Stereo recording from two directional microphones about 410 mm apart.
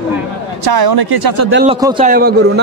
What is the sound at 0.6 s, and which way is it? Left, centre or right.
Speech, right.